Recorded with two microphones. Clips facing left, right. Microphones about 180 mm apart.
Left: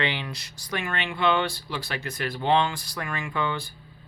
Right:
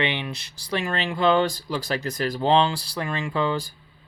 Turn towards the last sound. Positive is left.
turn(degrees=-35)  # may be behind; listen again after turning